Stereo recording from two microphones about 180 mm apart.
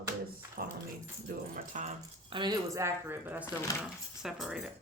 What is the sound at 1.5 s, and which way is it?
Speech, 40° right (ahead or behind).